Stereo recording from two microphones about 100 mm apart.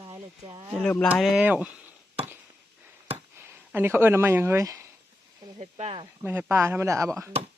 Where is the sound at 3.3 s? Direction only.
20° right (ahead or behind).